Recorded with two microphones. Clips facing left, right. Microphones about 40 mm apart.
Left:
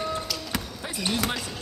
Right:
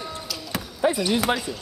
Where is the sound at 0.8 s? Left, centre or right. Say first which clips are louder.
Right 14 dB; right.